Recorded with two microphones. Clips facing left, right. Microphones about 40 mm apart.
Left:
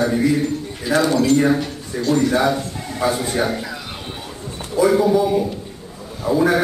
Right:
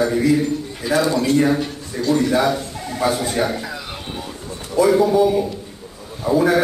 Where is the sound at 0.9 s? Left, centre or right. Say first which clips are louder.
Left 1 dB; left.